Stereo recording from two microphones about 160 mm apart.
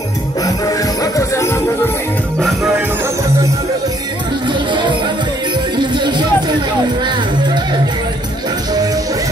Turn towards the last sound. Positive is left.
turn(degrees=-30)  # may be behind; listen again after turning